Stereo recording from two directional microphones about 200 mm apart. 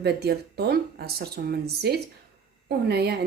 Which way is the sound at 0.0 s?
55° right (ahead or behind).